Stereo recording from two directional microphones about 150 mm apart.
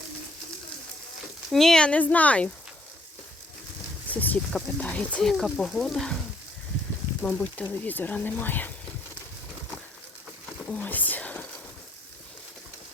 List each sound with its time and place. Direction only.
1.5 s speech: 5° left (ahead or behind)
4.1 s speech: 10° left (ahead or behind)
7.2 s speech: 5° left (ahead or behind)
10.7 s speech: 10° left (ahead or behind)